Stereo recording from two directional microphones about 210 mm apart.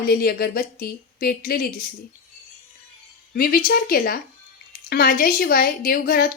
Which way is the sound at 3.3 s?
45° left (ahead or behind).